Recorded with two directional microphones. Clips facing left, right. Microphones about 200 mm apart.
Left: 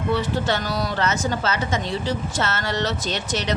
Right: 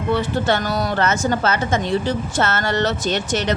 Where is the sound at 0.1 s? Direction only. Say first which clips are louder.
Right 4 dB; 50° right (ahead or behind).